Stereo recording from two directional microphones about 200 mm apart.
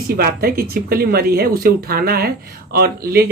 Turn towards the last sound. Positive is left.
turn(degrees=-50)  # may be behind; listen again after turning